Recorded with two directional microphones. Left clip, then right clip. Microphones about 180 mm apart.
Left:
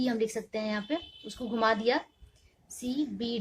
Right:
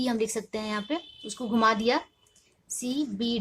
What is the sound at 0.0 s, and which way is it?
A woman's voice, 30° right (ahead or behind).